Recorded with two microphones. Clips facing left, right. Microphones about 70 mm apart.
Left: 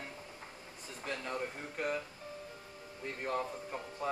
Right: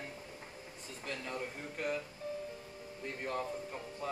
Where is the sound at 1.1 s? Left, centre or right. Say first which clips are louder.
Left 2 dB; centre.